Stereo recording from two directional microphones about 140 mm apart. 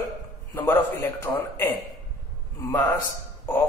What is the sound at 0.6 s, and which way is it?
Speech, 15° left (ahead or behind).